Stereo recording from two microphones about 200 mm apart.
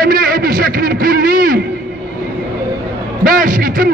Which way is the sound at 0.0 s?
45° right (ahead or behind).